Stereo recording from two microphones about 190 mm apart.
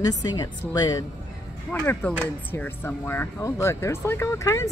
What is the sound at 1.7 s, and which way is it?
A woman's voice, 10° left (ahead or behind).